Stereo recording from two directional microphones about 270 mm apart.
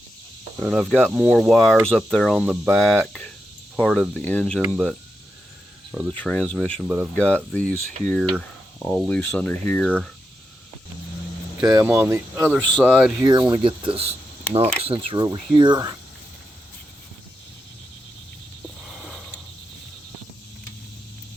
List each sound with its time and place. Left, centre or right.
0.6 s speech: centre
7.2 s speech: centre
11.7 s speech: centre
12.5 s speech: centre
13.5 s speech: centre
18.9 s sniff: centre